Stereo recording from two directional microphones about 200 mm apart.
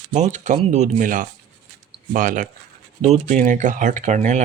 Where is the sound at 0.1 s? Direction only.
35° right (ahead or behind).